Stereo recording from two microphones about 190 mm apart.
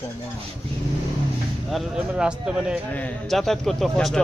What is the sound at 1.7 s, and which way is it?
A man's voice, centre (ahead or behind).